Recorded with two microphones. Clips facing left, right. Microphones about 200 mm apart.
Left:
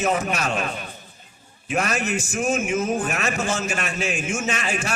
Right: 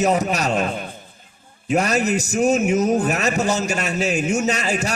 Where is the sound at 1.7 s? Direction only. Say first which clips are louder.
Right 5 dB; 40° right (ahead or behind).